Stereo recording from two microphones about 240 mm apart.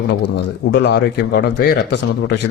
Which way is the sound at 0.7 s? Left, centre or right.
Left.